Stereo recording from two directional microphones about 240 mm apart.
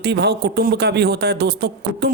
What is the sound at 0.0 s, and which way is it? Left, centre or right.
Speech, right.